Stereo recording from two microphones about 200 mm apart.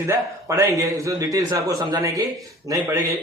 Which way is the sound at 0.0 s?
15° right (ahead or behind).